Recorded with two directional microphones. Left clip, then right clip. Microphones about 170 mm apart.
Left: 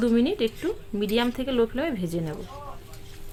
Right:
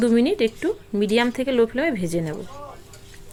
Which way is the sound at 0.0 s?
25° right (ahead or behind).